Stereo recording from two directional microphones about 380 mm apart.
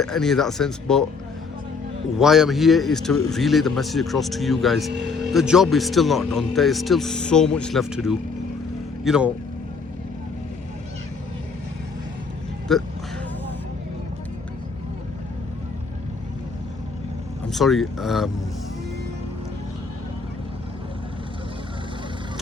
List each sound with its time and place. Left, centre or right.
0.0 s speech: centre
2.1 s speech: centre
4.9 s vehicle: right
5.3 s speech: centre
12.7 s speech: centre
17.5 s speech: centre